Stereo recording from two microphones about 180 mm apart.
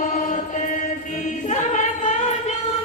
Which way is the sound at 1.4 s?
40° left (ahead or behind).